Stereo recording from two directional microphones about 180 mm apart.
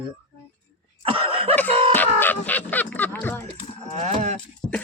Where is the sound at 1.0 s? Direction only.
30° right (ahead or behind).